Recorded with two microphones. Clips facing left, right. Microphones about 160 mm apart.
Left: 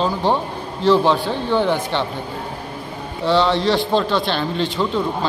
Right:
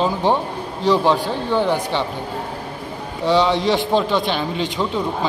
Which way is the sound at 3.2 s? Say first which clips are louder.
Even; 15° right (ahead or behind).